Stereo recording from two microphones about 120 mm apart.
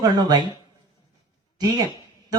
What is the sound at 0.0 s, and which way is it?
Speech, 35° right (ahead or behind).